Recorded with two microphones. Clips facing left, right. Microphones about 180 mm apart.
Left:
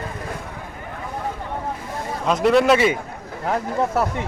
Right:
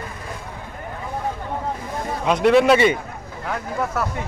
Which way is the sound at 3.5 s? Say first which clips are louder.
Left 4 dB; 30° left (ahead or behind).